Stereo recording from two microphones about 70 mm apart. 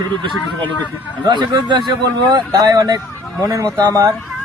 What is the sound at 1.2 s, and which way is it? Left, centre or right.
Speech, right.